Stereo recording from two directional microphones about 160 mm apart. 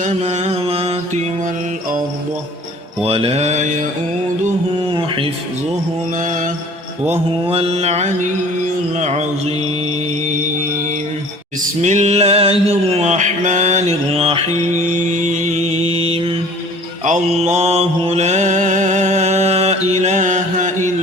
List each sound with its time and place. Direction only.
0.0 s music: 45° right (ahead or behind)
3.0 s music: 35° right (ahead or behind)
4.9 s a sound: 35° right (ahead or behind)
6.1 s mantra: 50° right (ahead or behind)
7.4 s music: 35° right (ahead or behind)
9.0 s mantra: 45° right (ahead or behind)
11.6 s a sound: 45° right (ahead or behind)
17.1 s mantra: 45° right (ahead or behind)